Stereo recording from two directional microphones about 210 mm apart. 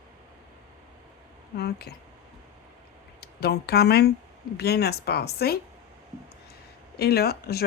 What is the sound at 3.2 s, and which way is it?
Speech, 50° left (ahead or behind).